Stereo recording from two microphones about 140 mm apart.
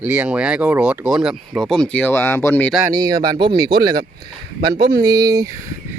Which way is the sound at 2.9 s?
25° right (ahead or behind).